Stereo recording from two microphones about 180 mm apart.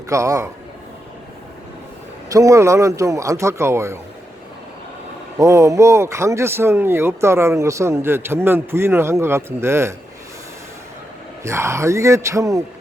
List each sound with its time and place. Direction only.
0.1 s speech: 15° right (ahead or behind)
2.3 s speech: 15° right (ahead or behind)
5.4 s speech: 15° right (ahead or behind)
11.4 s speech: 15° right (ahead or behind)